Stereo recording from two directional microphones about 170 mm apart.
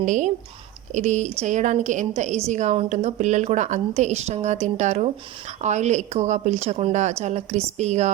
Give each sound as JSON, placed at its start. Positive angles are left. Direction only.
{"t": 0.0, "sound": "a woman's voice", "side_deg": -45}